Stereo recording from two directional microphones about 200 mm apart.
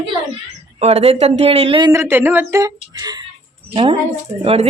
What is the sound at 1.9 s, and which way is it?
Speech, 10° right (ahead or behind).